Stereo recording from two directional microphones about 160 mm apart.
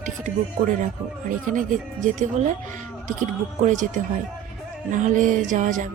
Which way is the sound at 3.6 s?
50° right (ahead or behind).